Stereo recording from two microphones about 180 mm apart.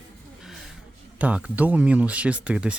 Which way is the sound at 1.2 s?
5° right (ahead or behind).